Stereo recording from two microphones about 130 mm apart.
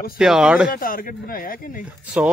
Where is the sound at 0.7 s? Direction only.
90° left.